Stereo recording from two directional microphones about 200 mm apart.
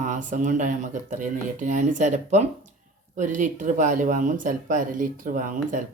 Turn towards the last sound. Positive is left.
turn(degrees=-40)  # may be behind; listen again after turning